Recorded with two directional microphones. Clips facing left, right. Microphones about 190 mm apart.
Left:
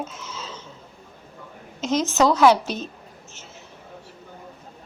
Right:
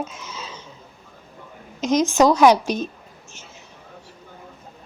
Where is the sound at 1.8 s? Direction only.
15° right (ahead or behind).